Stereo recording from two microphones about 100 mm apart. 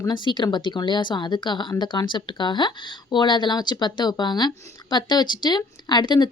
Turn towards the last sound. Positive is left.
turn(degrees=45)  # may be behind; listen again after turning